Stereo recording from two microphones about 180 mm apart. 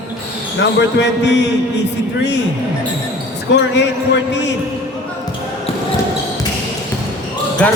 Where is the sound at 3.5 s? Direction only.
75° left (ahead or behind).